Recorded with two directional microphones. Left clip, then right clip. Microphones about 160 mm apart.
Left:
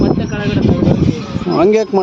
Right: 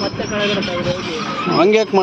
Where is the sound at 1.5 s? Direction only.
55° left (ahead or behind).